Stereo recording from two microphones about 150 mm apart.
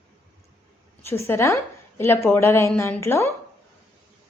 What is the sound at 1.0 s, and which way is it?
A woman's voice, 15° left (ahead or behind).